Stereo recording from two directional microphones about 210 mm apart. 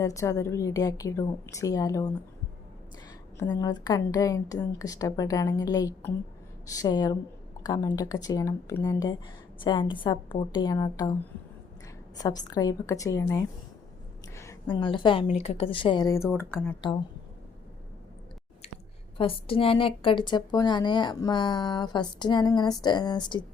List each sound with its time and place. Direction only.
0.0 s a woman's voice: 15° left (ahead or behind)
3.3 s a woman's voice: 20° left (ahead or behind)
16.8 s a woman's voice: 20° left (ahead or behind)
19.1 s a woman's voice: 25° left (ahead or behind)